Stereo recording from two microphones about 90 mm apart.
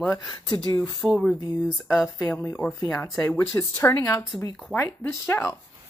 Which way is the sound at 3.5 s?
25° left (ahead or behind).